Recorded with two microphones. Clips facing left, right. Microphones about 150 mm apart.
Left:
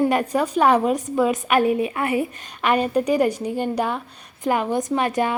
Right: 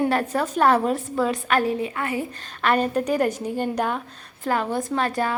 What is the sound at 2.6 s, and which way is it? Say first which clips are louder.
A woman's voice: left 2 dB; 10° left (ahead or behind).